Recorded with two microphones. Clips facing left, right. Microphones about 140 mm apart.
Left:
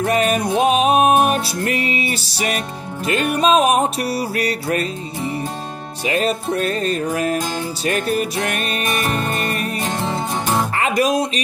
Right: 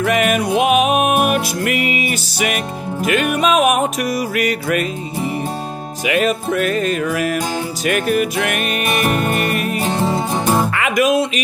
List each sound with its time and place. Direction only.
0.0 s music: 35° left (ahead or behind)
6.0 s music: 35° left (ahead or behind)
8.8 s music: 10° right (ahead or behind)
9.5 s music: 35° left (ahead or behind)
9.8 s music: 10° right (ahead or behind)
10.7 s speech: 35° left (ahead or behind)